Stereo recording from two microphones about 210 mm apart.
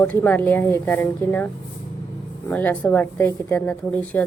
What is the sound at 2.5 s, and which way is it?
Speech, 10° left (ahead or behind).